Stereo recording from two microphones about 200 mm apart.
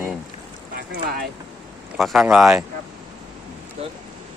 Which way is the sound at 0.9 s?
45° right (ahead or behind).